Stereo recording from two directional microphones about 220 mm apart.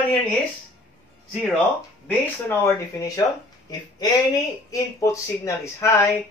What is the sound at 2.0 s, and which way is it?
Speech, 10° left (ahead or behind).